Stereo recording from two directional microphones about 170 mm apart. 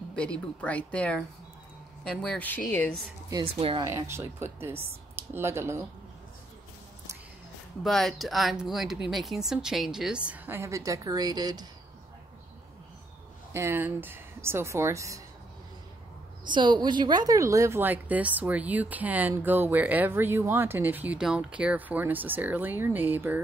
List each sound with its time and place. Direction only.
0.1 s speech: 5° left (ahead or behind)
3.5 s speech: 30° right (ahead or behind)
3.8 s a woman's voice: 15° right (ahead or behind)
7.8 s speech: centre (ahead or behind); by 11.6 s 25° right (ahead or behind)
13.5 s a woman's voice: 15° right (ahead or behind)
16.4 s a woman's voice: 25° right (ahead or behind); by 23.4 s 10° right (ahead or behind)